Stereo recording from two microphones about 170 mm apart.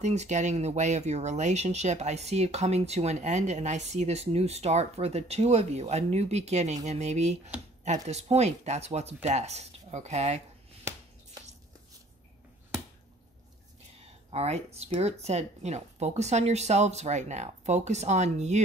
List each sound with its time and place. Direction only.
0.0 s speech: 40° right (ahead or behind)
13.9 s speech: 40° right (ahead or behind)